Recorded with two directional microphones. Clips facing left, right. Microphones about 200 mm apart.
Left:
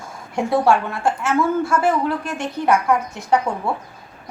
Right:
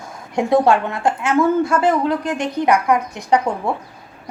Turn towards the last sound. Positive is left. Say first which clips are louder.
# right 2 dB
turn(degrees=-15)  # may be behind; listen again after turning